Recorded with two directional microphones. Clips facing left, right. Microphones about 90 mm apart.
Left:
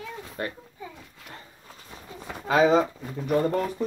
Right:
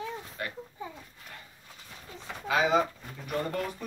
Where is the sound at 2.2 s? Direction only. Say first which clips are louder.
Left 6 dB; 40° left (ahead or behind).